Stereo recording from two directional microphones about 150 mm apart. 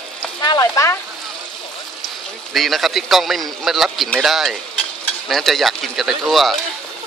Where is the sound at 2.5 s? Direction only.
Centre (ahead or behind).